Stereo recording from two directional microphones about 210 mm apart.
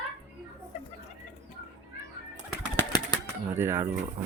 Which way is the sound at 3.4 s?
10° right (ahead or behind).